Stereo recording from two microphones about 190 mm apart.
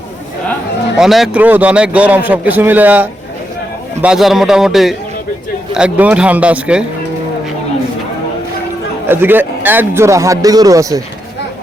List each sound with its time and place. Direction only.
0.9 s a man's voice: centre (ahead or behind)
9.0 s a man's voice: 10° right (ahead or behind)